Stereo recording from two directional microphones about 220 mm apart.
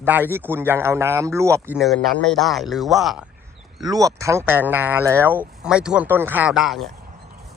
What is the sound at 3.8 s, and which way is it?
A man's voice, 15° right (ahead or behind).